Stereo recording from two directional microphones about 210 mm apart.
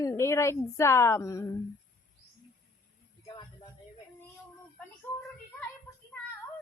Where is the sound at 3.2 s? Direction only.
20° left (ahead or behind).